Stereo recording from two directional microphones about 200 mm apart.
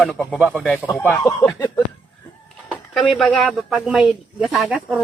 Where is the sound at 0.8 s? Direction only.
10° left (ahead or behind).